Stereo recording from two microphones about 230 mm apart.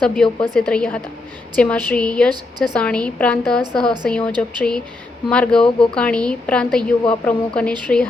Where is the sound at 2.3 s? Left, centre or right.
Centre.